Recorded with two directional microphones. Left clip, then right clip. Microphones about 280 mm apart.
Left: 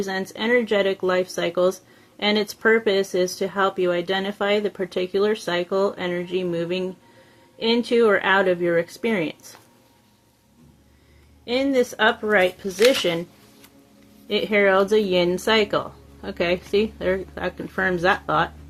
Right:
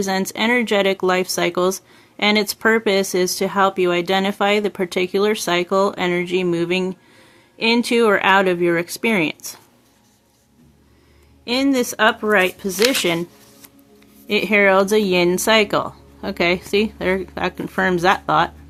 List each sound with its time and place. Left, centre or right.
0.0 s speech: right
11.4 s speech: right
14.3 s speech: right